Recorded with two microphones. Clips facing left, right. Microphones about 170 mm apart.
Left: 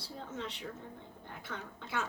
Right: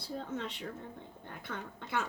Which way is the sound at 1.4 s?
55° right (ahead or behind).